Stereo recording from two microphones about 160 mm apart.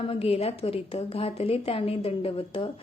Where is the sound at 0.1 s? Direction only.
35° left (ahead or behind).